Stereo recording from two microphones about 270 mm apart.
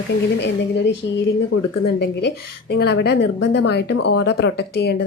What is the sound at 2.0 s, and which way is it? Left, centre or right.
Speech, left.